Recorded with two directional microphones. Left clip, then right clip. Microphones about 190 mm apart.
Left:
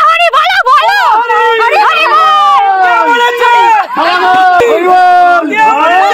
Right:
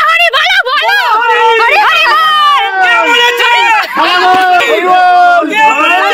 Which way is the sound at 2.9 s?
40° left (ahead or behind).